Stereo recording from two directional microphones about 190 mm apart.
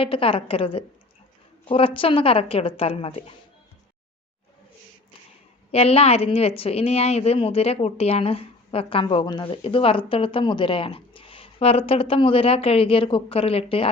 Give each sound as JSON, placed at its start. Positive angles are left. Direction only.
{"t": 0.0, "sound": "a woman's voice", "side_deg": 30}
{"t": 5.7, "sound": "a woman's voice", "side_deg": 30}